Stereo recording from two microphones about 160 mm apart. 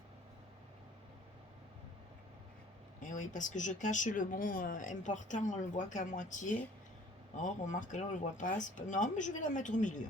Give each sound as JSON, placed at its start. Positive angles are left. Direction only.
{"t": 3.0, "sound": "speech", "side_deg": 50}